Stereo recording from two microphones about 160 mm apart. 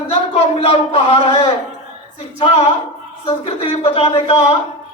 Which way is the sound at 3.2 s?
35° left (ahead or behind).